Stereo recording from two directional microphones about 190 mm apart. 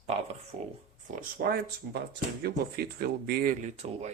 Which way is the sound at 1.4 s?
55° right (ahead or behind).